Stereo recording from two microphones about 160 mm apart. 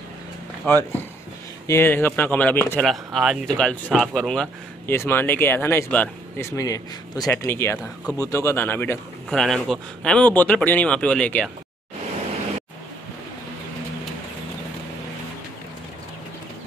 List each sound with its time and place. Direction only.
0.7 s speech: 15° left (ahead or behind)
2.8 s speech: centre (ahead or behind)
7.8 s speech: 5° left (ahead or behind)
8.3 s speech: 15° left (ahead or behind)
9.3 s speech: centre (ahead or behind)